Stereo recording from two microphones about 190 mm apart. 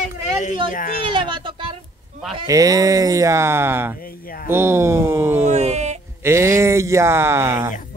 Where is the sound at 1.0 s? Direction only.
25° right (ahead or behind).